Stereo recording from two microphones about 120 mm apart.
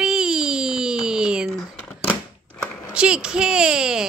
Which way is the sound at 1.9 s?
10° left (ahead or behind).